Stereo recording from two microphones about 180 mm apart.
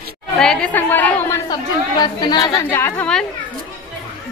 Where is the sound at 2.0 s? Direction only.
25° left (ahead or behind); by 3.3 s 5° left (ahead or behind).